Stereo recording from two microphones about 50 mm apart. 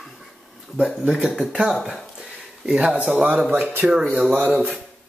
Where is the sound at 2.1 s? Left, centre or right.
Centre.